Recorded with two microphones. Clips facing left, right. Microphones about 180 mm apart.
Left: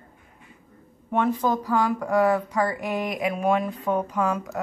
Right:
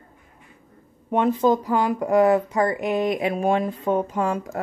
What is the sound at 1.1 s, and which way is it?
Speech, 20° right (ahead or behind).